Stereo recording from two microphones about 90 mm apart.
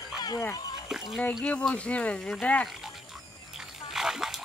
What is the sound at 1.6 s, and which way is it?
Speech, 10° left (ahead or behind).